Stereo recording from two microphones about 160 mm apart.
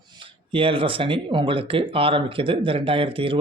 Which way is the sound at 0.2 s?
35° right (ahead or behind).